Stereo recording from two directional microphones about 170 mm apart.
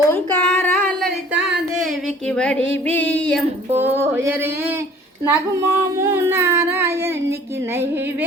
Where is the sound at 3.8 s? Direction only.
10° right (ahead or behind).